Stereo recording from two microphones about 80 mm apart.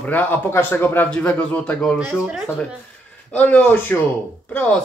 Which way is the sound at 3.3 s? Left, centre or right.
Centre.